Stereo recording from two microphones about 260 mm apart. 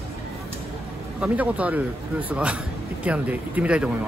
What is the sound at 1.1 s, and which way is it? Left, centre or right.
A man's voice, centre.